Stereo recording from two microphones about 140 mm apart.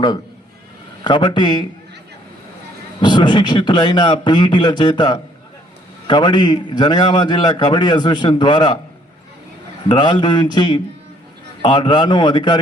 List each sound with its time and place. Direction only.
1.0 s a man's voice: 35° left (ahead or behind)
3.0 s a man's voice: 35° left (ahead or behind)
9.9 s a man's voice: 35° left (ahead or behind)